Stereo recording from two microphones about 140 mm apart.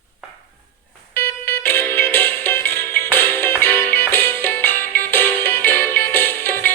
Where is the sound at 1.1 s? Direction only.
15° left (ahead or behind).